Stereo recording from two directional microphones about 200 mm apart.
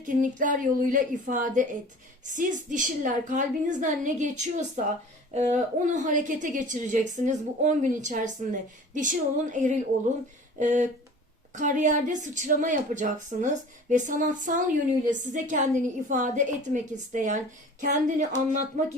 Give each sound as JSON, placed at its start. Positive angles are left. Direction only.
{"t": 0.0, "sound": "a woman's voice", "side_deg": -40}